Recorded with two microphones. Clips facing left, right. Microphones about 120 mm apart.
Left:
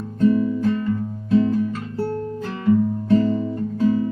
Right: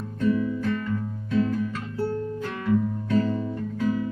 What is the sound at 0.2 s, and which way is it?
Music, 30° left (ahead or behind).